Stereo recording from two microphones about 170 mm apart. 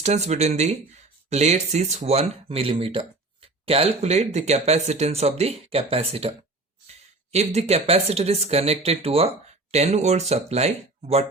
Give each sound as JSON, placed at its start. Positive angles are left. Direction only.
{"t": 0.0, "sound": "speech", "side_deg": -40}